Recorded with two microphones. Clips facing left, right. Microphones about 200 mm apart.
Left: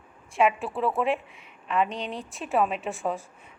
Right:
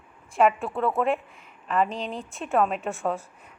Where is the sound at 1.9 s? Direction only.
30° right (ahead or behind).